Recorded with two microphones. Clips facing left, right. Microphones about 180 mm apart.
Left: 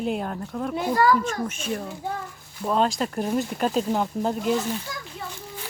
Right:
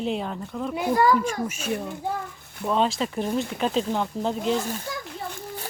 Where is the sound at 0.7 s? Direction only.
10° right (ahead or behind).